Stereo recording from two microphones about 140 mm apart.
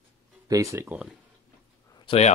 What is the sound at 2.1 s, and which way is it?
Speech, 50° left (ahead or behind).